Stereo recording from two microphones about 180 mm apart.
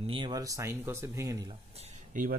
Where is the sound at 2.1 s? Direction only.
45° right (ahead or behind).